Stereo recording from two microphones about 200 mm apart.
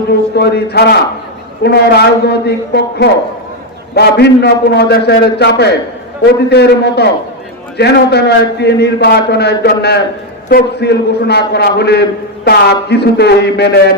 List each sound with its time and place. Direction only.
0.1 s a man's voice: 55° left (ahead or behind)